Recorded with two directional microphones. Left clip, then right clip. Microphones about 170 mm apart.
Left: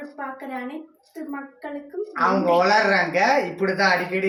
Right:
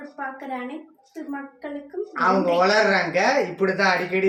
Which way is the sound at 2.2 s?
10° left (ahead or behind).